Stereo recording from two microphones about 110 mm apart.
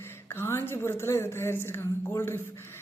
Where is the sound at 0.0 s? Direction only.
20° left (ahead or behind).